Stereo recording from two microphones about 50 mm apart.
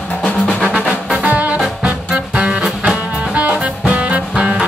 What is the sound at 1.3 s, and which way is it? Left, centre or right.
Music, right.